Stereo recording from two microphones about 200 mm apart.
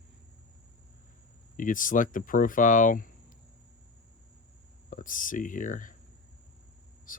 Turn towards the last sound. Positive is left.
turn(degrees=40)  # may be behind; listen again after turning